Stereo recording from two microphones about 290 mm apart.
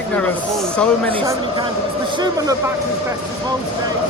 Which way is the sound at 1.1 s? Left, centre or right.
Centre.